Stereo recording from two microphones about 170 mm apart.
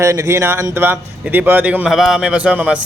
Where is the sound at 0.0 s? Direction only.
15° right (ahead or behind).